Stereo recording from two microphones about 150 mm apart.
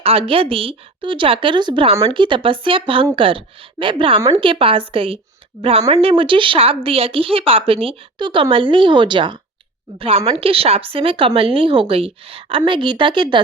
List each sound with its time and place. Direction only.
0.0 s a woman's voice: 40° right (ahead or behind)